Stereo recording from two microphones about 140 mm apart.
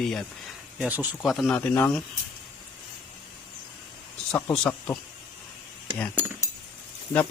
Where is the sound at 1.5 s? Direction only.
15° left (ahead or behind).